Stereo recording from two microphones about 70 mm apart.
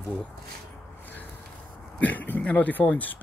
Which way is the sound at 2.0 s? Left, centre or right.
Left.